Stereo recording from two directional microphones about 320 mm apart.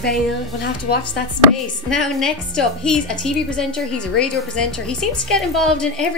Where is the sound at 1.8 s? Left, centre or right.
Centre.